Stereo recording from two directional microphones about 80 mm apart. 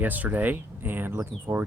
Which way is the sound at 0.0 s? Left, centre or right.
Right.